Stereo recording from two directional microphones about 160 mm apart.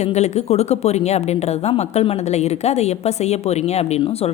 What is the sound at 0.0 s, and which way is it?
A woman's voice, 45° left (ahead or behind).